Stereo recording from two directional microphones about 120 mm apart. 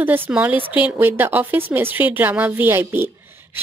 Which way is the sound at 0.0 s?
15° right (ahead or behind).